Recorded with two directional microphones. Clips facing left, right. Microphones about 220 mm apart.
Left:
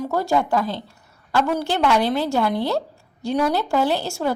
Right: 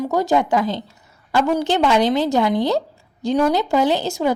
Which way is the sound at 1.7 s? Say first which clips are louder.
Right 3 dB; 20° right (ahead or behind).